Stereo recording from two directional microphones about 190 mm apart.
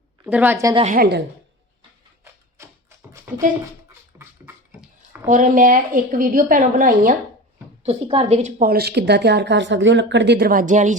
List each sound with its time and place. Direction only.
0.3 s a woman's voice: 10° right (ahead or behind)
0.9 s a woman's voice: 60° right (ahead or behind)
2.6 s music: 15° right (ahead or behind)
4.1 s beatboxing: 5° right (ahead or behind)
5.2 s a woman's voice: 45° right (ahead or behind)
7.9 s a woman's voice: 30° right (ahead or behind)